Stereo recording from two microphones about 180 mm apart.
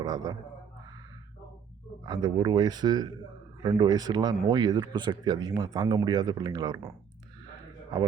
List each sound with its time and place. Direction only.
0.0 s a man's voice: 20° right (ahead or behind)
2.0 s a man's voice: 25° right (ahead or behind)